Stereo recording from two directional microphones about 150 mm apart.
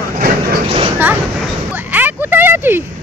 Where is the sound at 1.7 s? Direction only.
10° right (ahead or behind).